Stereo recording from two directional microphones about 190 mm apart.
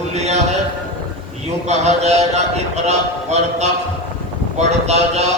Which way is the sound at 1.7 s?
35° right (ahead or behind).